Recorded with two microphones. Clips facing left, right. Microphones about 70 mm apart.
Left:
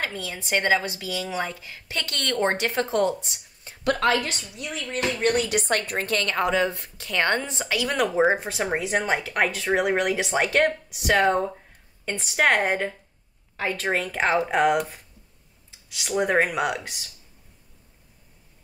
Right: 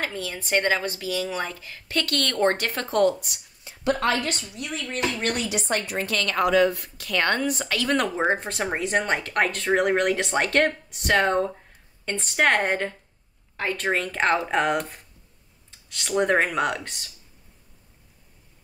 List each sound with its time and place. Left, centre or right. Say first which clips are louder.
0.0 s a woman's voice: right 1 dB; centre
3.6 s a sound: even; left
4.2 s a woman's voice: right 2 dB; right
5.3 s a woman's voice: left 3 dB; left
7.6 s speech: even; centre